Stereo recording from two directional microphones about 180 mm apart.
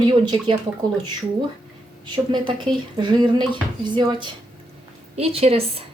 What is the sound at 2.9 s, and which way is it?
A woman's voice, 25° right (ahead or behind).